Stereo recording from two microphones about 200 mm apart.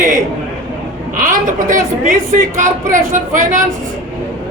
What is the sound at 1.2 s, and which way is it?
Speech, 40° right (ahead or behind).